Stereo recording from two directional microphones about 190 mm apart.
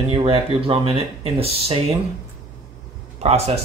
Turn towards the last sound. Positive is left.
turn(degrees=-35)  # may be behind; listen again after turning